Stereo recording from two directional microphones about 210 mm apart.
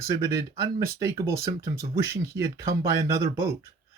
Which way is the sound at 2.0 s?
15° right (ahead or behind).